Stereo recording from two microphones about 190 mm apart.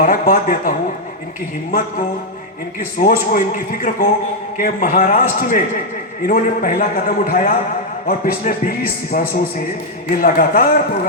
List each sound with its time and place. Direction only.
0.0 s speech: 50° left (ahead or behind)
3.0 s a man's voice: 45° left (ahead or behind)